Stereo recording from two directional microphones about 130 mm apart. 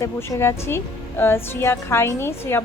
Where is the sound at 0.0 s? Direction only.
20° left (ahead or behind).